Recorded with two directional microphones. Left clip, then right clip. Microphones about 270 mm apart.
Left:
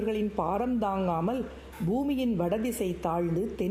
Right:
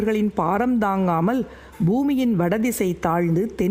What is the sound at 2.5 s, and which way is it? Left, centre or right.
Mantra, right.